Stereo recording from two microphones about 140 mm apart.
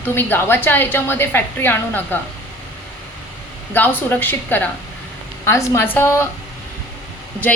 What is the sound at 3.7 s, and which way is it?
A woman's voice, 15° left (ahead or behind).